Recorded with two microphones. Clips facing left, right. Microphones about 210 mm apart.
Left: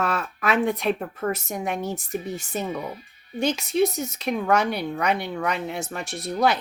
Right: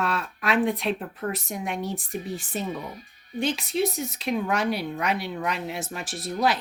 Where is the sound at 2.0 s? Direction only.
Centre (ahead or behind).